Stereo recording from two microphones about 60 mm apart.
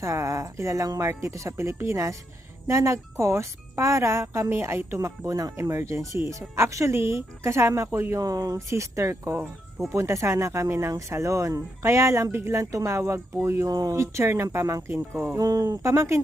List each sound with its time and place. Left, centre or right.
0.0 s speech: right
5.5 s speech: right
6.9 s speech: right
8.1 s speech: right
8.7 s speech: right
12.5 s speech: right
13.7 s speech: right
13.9 s speech: right
15.4 s speech: right
15.8 s speech: right